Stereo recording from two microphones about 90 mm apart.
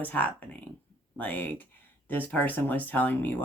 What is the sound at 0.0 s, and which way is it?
Speech, 15° left (ahead or behind).